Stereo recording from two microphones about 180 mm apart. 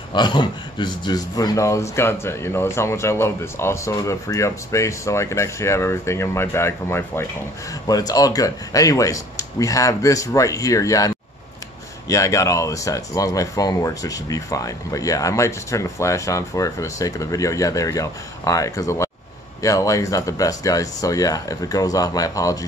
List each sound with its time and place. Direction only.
0.1 s a man's voice: 25° left (ahead or behind)